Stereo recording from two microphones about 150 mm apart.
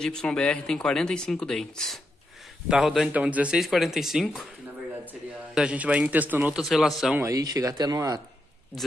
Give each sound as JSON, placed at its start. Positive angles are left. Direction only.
{"t": 0.0, "sound": "speech", "side_deg": 5}
{"t": 5.5, "sound": "a man's voice", "side_deg": -10}
{"t": 7.2, "sound": "speech", "side_deg": -20}